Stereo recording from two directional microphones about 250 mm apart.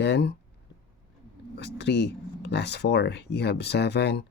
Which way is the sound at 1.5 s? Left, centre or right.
Left.